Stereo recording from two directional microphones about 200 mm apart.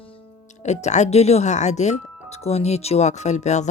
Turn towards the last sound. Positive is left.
turn(degrees=35)  # may be behind; listen again after turning